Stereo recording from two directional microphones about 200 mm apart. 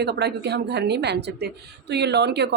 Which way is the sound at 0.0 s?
55° right (ahead or behind).